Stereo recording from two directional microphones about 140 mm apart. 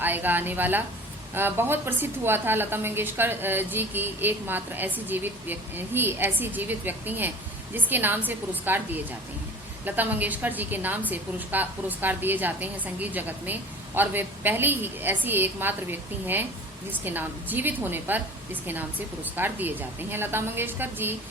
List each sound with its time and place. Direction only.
0.0 s a woman's voice: 15° right (ahead or behind)